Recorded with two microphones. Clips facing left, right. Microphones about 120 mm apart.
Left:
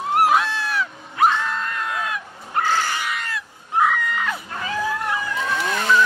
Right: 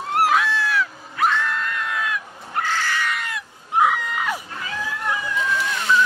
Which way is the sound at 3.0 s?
5° left (ahead or behind).